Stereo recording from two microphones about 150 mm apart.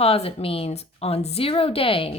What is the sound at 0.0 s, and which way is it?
A woman's voice, 40° left (ahead or behind).